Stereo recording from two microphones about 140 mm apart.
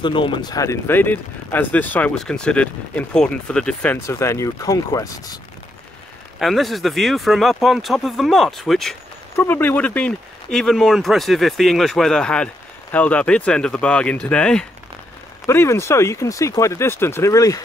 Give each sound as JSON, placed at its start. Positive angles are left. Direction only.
{"t": 0.0, "sound": "speech", "side_deg": 35}
{"t": 4.0, "sound": "speech", "side_deg": 20}
{"t": 6.4, "sound": "speech", "side_deg": 0}
{"t": 9.4, "sound": "speech", "side_deg": 15}
{"t": 15.4, "sound": "speech", "side_deg": 20}